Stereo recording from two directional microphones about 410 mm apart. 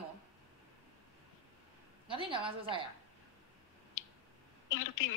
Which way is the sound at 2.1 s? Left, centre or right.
Centre.